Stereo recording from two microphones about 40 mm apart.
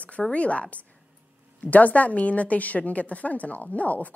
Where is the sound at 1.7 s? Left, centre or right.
Left.